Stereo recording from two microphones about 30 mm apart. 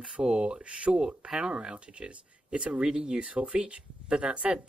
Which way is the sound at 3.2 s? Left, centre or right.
Right.